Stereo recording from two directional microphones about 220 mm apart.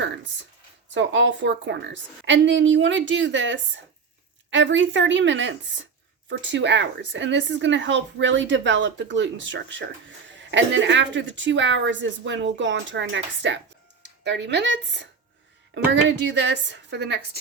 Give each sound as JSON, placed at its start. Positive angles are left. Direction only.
{"t": 0.9, "sound": "a woman's voice", "side_deg": -55}